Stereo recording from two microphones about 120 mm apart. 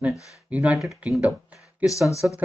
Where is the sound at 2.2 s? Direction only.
15° right (ahead or behind).